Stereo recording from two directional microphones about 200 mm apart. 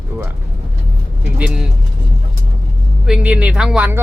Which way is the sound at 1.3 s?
5° right (ahead or behind).